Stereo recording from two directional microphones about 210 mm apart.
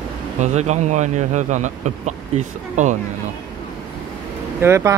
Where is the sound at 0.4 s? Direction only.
35° right (ahead or behind).